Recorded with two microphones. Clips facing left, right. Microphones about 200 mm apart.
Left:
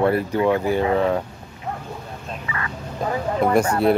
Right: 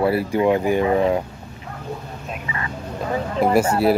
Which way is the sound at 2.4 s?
25° right (ahead or behind).